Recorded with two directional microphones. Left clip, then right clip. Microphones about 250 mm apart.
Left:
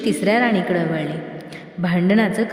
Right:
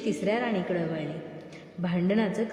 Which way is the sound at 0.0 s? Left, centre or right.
Left.